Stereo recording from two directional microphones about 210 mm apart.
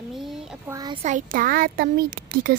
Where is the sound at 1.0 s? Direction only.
35° right (ahead or behind).